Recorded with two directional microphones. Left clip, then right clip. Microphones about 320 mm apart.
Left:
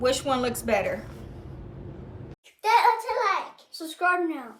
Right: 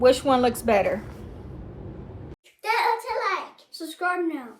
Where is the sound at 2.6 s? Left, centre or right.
Centre.